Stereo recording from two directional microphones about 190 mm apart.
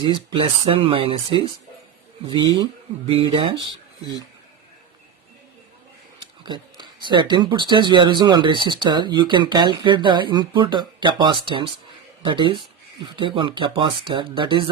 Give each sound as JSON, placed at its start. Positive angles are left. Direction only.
{"t": 0.0, "sound": "speech", "side_deg": -25}
{"t": 6.4, "sound": "speech", "side_deg": -25}